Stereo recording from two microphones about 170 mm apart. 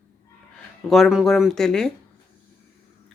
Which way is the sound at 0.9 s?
Centre (ahead or behind).